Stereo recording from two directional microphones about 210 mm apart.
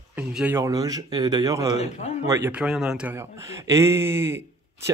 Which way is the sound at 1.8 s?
30° left (ahead or behind).